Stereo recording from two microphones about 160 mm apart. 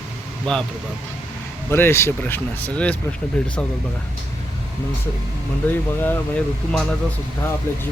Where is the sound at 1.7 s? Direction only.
15° left (ahead or behind).